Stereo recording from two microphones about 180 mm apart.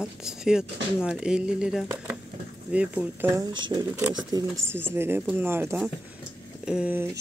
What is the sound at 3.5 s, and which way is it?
Speech, 25° right (ahead or behind).